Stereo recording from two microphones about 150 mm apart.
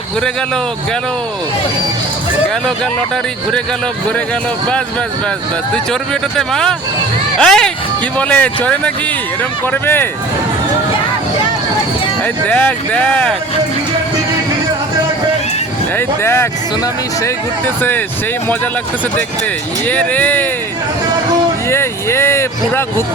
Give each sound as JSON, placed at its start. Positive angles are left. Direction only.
{"t": 5.7, "sound": "speech", "side_deg": 5}
{"t": 12.2, "sound": "speech", "side_deg": 10}
{"t": 16.0, "sound": "speech", "side_deg": 15}
{"t": 19.9, "sound": "speech", "side_deg": 10}
{"t": 21.7, "sound": "speech", "side_deg": 15}